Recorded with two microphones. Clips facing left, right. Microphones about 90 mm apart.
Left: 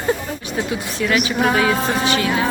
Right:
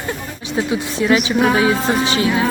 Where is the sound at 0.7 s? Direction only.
25° right (ahead or behind).